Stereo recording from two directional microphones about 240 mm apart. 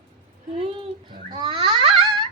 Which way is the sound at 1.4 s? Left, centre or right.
Right.